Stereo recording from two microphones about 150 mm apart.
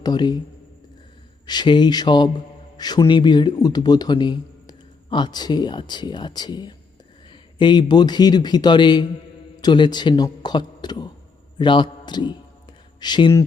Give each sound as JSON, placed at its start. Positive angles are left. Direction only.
{"t": 0.0, "sound": "a man's voice", "side_deg": 30}
{"t": 1.5, "sound": "a man's voice", "side_deg": 30}